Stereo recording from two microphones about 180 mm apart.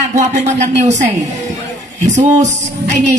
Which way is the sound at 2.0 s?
40° right (ahead or behind).